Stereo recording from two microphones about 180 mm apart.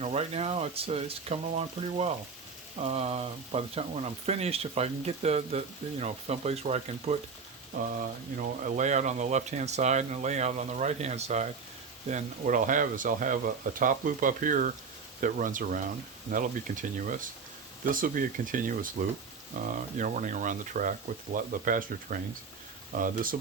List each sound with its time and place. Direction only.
0.0 s speech: 35° right (ahead or behind)
8.4 s speech: 45° right (ahead or behind)